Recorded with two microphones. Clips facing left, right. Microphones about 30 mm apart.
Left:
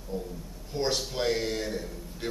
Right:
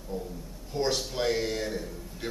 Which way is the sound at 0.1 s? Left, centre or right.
Centre.